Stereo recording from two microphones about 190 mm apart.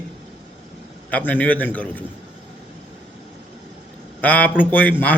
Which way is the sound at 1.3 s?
10° left (ahead or behind).